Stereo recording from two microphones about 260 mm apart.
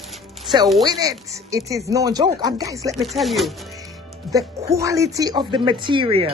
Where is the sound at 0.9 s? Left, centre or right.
Centre.